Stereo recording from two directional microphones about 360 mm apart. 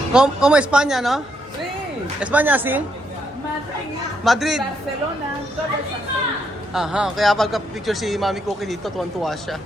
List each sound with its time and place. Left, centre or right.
0.1 s a man's voice: centre
2.2 s a man's voice: centre
4.2 s a man's voice: centre
6.7 s a man's voice: centre